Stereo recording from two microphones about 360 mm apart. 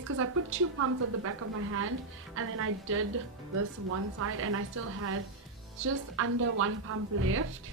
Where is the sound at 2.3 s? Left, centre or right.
Right.